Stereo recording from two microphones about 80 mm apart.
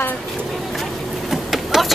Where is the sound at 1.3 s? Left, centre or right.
Centre.